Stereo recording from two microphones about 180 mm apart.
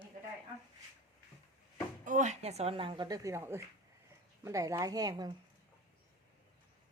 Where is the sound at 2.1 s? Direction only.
40° right (ahead or behind); by 5.3 s 20° right (ahead or behind).